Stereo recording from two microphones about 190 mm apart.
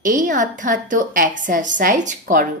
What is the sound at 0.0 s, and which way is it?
A woman's voice, 45° right (ahead or behind).